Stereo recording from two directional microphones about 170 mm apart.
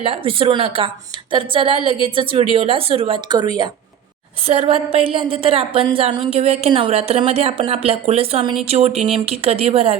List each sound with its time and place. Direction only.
0.0 s a woman's voice: 35° right (ahead or behind)
4.4 s a woman's voice: 35° right (ahead or behind)